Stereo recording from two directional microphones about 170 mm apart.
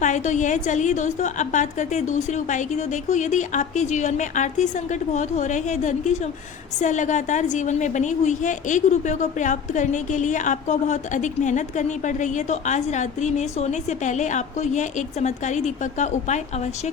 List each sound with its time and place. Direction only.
0.0 s a woman's voice: 45° left (ahead or behind)